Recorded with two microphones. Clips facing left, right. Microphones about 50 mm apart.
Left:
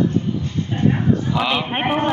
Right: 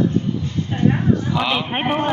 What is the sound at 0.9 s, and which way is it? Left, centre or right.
A man's voice, centre.